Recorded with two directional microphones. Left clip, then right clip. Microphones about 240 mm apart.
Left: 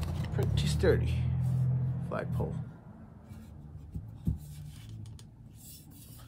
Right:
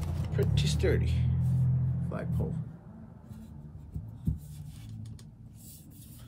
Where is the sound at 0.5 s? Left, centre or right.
Centre.